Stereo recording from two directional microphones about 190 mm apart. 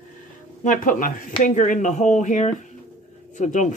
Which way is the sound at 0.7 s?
45° left (ahead or behind).